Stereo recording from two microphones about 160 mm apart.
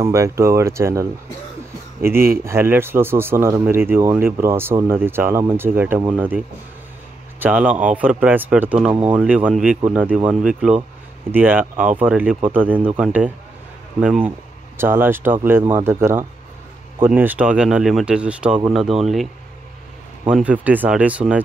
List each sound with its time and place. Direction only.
0.0 s speech: 20° right (ahead or behind); by 19.2 s centre (ahead or behind)
20.2 s speech: 5° right (ahead or behind)